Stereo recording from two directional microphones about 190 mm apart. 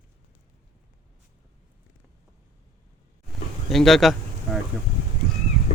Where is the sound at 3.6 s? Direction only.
Centre (ahead or behind).